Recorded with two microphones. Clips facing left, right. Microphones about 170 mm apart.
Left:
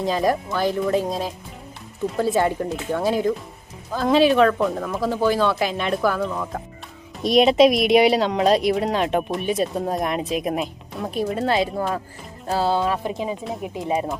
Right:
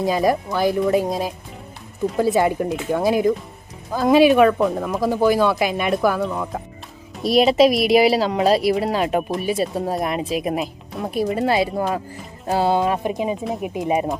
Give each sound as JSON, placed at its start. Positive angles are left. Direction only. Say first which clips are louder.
{"t": 0.0, "sound": "speech", "louder": "right 2 dB", "side_deg": -10}